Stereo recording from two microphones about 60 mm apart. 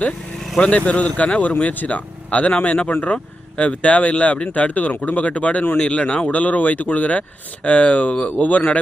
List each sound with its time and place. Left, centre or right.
0.9 s speech: left
6.4 s speech: left